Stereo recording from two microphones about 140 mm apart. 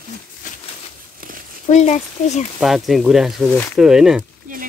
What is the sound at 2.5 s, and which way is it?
Speech, centre (ahead or behind).